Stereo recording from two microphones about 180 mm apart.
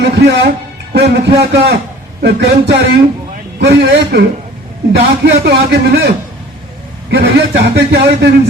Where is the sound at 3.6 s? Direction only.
65° right (ahead or behind).